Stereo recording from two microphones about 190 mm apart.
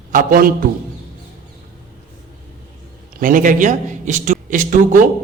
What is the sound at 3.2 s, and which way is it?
A man's voice, 45° right (ahead or behind).